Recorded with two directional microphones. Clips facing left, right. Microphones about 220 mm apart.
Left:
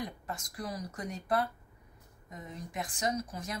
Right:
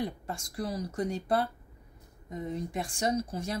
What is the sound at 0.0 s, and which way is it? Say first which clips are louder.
Speech: right 5 dB; 30° right (ahead or behind).